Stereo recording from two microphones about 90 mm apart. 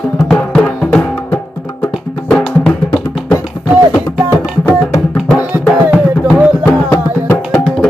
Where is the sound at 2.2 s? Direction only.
15° left (ahead or behind).